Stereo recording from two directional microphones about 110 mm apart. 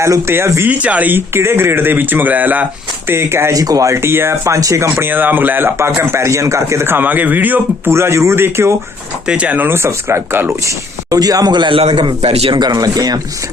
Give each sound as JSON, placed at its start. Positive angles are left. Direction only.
{"t": 0.0, "sound": "speech", "side_deg": -25}
{"t": 0.7, "sound": "speech", "side_deg": -15}
{"t": 9.2, "sound": "speech", "side_deg": -10}
{"t": 11.1, "sound": "speech", "side_deg": -35}
{"t": 12.2, "sound": "a man's voice", "side_deg": -65}
{"t": 12.5, "sound": "speech", "side_deg": -35}